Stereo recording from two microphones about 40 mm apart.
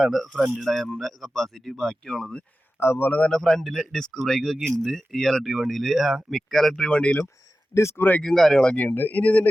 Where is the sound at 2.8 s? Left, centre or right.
Left.